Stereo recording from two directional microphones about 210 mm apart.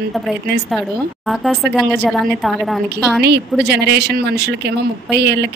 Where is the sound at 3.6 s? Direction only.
50° right (ahead or behind).